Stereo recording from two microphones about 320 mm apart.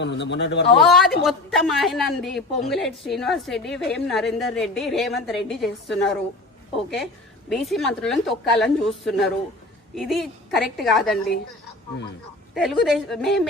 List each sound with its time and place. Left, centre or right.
0.0 s speech: left
0.8 s a man's voice: centre
7.5 s a man's voice: centre
12.5 s a man's voice: centre